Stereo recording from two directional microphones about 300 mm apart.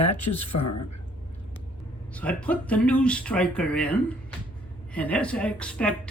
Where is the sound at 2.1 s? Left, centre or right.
Centre.